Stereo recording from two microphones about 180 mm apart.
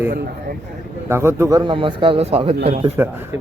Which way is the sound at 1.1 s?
15° right (ahead or behind).